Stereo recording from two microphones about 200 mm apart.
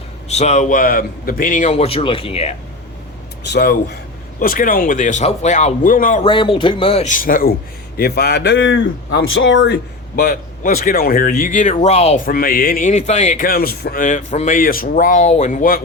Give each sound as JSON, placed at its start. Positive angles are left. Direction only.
{"t": 0.3, "sound": "a man's voice", "side_deg": 35}
{"t": 3.4, "sound": "speech", "side_deg": 55}
{"t": 4.4, "sound": "a man's voice", "side_deg": 45}
{"t": 6.2, "sound": "speech", "side_deg": 25}
{"t": 10.2, "sound": "a man's voice", "side_deg": 45}
{"t": 12.2, "sound": "a man's voice", "side_deg": 45}